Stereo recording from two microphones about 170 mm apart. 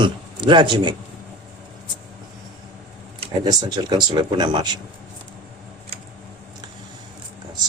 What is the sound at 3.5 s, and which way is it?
Speech, 25° right (ahead or behind).